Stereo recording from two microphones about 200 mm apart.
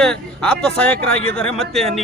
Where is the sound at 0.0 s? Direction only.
5° left (ahead or behind).